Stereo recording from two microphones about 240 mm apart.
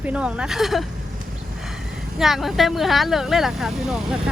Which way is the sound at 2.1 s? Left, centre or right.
Centre.